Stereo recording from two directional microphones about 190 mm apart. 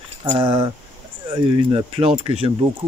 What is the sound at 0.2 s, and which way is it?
Speech, 25° right (ahead or behind).